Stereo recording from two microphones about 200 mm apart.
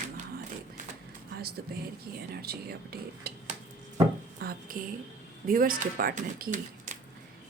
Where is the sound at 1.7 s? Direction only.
50° right (ahead or behind).